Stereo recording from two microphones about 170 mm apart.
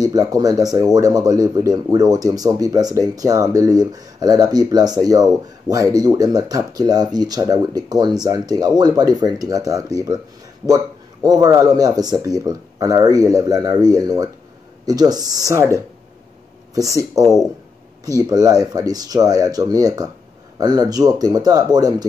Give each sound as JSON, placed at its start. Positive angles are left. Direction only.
{"t": 0.0, "sound": "speech", "side_deg": -20}
{"t": 11.2, "sound": "speech", "side_deg": -20}